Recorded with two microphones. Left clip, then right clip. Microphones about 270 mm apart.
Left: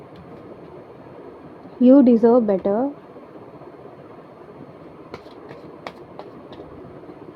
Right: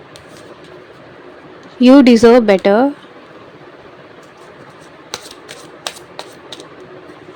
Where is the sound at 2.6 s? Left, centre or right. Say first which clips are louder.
Right 10 dB; right.